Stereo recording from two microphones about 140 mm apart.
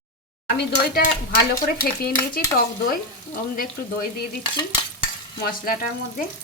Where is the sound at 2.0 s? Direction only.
90° left.